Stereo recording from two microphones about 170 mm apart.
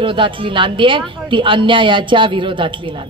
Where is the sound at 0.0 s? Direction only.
30° right (ahead or behind).